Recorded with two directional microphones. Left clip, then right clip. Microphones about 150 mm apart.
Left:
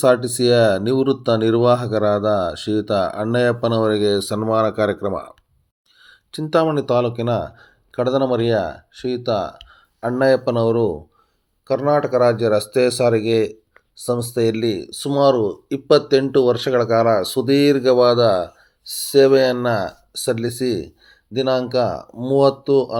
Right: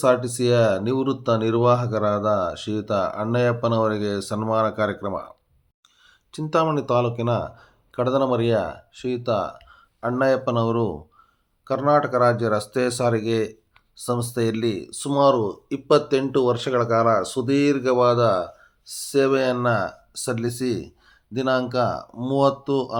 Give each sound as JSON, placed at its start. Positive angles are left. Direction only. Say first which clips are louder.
{"t": 0.0, "sound": "speech", "louder": "left 4 dB", "side_deg": 25}